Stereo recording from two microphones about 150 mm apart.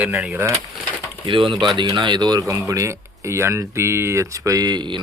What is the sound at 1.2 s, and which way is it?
Speech, 35° right (ahead or behind).